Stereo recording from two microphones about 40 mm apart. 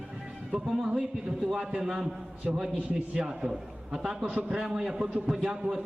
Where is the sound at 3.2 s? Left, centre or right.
Right.